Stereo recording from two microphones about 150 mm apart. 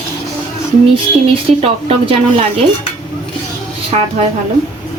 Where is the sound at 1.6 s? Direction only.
40° right (ahead or behind).